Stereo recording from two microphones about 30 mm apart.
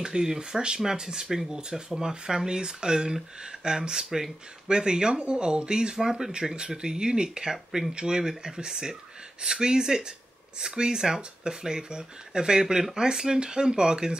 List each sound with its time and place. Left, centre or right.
0.0 s speech: right
5.9 s speech: centre